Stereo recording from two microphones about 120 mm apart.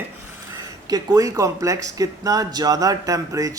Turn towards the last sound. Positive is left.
turn(degrees=-30)  # may be behind; listen again after turning